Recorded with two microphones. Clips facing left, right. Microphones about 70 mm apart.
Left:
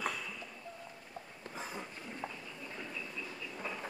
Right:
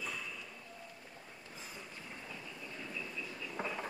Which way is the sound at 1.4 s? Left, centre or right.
Left.